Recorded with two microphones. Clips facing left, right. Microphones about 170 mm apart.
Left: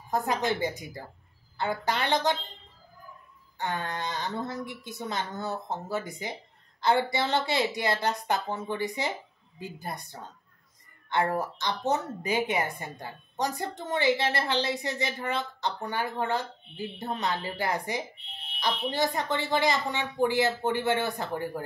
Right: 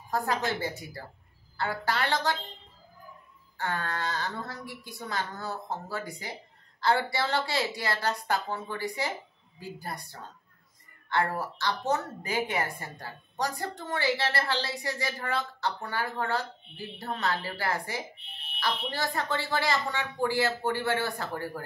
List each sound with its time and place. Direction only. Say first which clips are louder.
0.1 s a woman's voice: left 2 dB; 20° left (ahead or behind)
3.5 s a woman's voice: even; 20° left (ahead or behind)